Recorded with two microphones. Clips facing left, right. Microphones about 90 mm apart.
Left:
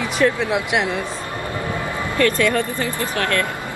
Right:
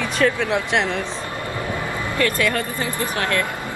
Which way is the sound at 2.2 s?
15° right (ahead or behind).